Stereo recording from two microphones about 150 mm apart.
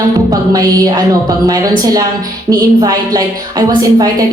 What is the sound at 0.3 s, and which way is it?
A woman's voice, 25° right (ahead or behind).